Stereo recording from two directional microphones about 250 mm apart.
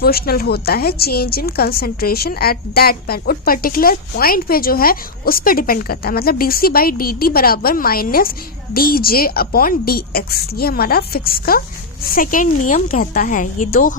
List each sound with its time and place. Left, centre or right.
0.0 s a woman's voice: left